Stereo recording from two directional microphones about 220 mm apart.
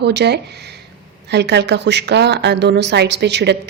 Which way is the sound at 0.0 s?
50° right (ahead or behind).